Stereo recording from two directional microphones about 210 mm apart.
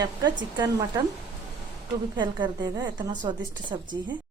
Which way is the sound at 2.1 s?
20° right (ahead or behind).